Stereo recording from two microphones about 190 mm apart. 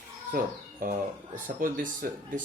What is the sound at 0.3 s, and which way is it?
Speech, 45° right (ahead or behind).